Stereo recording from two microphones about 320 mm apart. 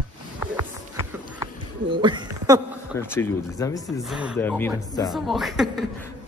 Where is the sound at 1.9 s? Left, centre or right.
Centre.